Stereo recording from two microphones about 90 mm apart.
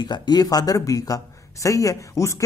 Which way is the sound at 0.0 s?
50° left (ahead or behind).